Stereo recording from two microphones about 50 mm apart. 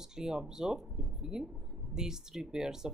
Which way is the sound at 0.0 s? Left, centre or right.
Centre.